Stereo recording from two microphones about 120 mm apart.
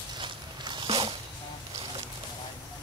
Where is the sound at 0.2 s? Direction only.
40° right (ahead or behind).